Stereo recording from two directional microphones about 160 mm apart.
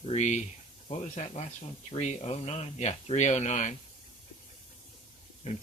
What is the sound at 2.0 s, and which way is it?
Mantra, 40° left (ahead or behind).